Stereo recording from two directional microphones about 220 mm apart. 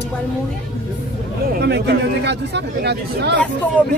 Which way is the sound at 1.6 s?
50° right (ahead or behind).